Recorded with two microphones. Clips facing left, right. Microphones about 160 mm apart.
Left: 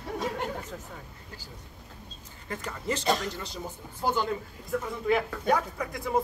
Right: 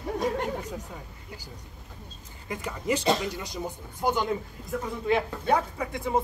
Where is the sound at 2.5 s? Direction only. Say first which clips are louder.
Right 4 dB; 10° right (ahead or behind).